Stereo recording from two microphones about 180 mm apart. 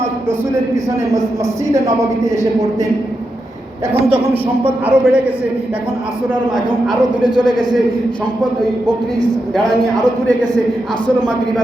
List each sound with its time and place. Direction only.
4.6 s a man's voice: 10° right (ahead or behind)
7.3 s a man's voice: 25° right (ahead or behind)